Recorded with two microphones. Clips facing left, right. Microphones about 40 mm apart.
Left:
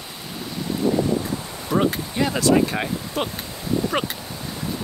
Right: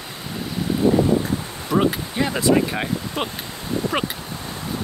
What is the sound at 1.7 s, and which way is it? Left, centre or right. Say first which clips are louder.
Speech: right 1 dB; centre.